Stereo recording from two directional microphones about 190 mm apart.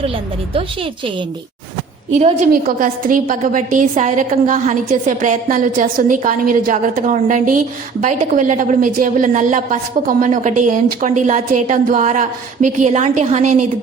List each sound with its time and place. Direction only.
2.1 s a woman's voice: 40° right (ahead or behind)